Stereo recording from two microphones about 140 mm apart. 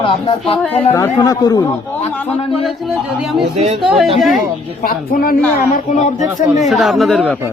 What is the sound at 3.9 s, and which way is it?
Music, centre (ahead or behind).